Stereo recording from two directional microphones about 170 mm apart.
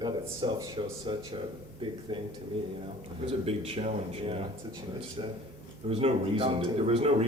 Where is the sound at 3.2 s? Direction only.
35° right (ahead or behind).